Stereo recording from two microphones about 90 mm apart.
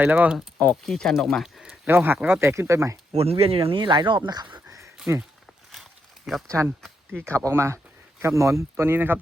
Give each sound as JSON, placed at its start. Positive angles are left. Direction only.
{"t": 0.0, "sound": "speech", "side_deg": -15}
{"t": 0.9, "sound": "speech", "side_deg": 5}
{"t": 1.9, "sound": "speech", "side_deg": -25}
{"t": 3.1, "sound": "speech", "side_deg": -90}
{"t": 5.1, "sound": "speech", "side_deg": -35}
{"t": 5.7, "sound": "walk", "side_deg": 0}
{"t": 6.5, "sound": "speech", "side_deg": -30}
{"t": 7.4, "sound": "speech", "side_deg": -30}